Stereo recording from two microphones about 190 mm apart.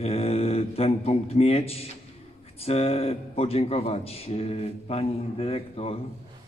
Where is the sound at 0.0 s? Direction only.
30° left (ahead or behind).